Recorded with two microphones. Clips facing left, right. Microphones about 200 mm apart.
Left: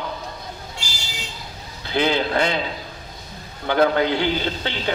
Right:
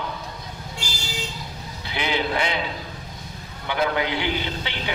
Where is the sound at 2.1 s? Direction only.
50° left (ahead or behind).